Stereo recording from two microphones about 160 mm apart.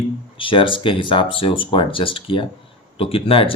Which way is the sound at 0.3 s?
30° left (ahead or behind).